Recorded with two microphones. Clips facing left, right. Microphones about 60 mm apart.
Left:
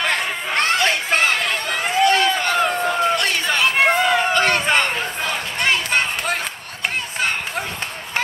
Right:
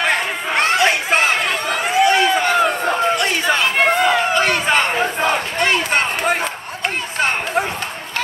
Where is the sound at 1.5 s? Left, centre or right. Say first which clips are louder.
Right 3 dB; centre.